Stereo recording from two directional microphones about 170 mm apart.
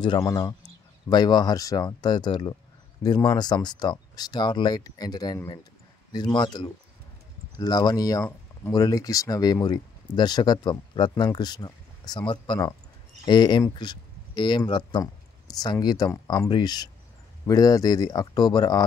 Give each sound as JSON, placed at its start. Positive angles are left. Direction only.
{"t": 0.0, "sound": "speech", "side_deg": 25}